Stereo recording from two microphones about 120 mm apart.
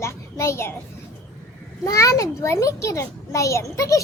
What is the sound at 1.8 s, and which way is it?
A child's voice, 30° left (ahead or behind).